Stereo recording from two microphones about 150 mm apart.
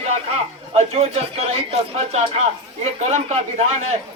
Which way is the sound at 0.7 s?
40° right (ahead or behind).